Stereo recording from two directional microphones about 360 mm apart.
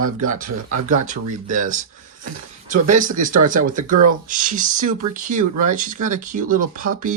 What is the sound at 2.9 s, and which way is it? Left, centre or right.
Speech, right.